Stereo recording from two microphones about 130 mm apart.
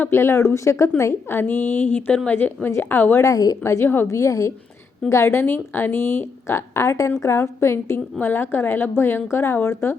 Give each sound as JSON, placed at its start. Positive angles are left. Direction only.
{"t": 0.0, "sound": "a woman's voice", "side_deg": 20}